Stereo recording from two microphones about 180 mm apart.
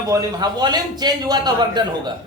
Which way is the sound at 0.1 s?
20° right (ahead or behind).